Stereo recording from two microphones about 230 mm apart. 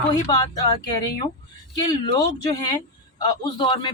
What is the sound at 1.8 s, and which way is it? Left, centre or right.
A man's voice, centre.